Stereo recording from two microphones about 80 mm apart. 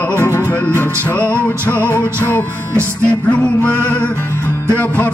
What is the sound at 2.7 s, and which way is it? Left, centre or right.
Music, right.